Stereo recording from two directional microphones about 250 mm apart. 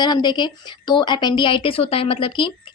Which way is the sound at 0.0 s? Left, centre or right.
Centre.